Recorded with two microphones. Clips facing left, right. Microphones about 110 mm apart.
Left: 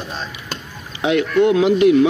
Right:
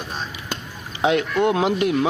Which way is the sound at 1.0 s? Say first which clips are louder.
Left 3 dB; 40° right (ahead or behind).